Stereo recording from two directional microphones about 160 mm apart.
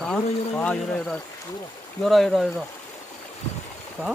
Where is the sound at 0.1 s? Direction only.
5° left (ahead or behind).